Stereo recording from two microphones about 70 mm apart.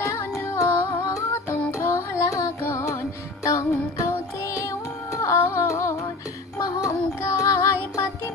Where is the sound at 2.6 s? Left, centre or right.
Left.